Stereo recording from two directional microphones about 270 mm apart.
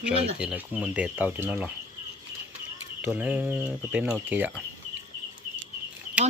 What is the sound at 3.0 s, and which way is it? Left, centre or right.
Speech, centre.